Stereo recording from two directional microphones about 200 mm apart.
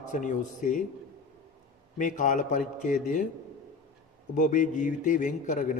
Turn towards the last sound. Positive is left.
turn(degrees=40)  # may be behind; listen again after turning